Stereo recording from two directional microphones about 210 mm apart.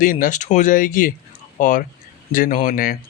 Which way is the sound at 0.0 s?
40° left (ahead or behind).